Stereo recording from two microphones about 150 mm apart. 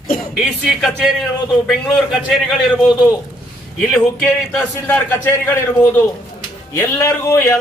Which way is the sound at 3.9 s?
5° left (ahead or behind).